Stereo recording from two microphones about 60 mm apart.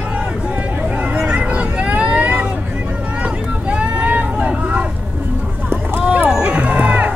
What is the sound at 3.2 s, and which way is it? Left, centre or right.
Vehicle, right.